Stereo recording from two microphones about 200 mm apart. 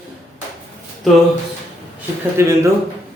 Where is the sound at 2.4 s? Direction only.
15° right (ahead or behind).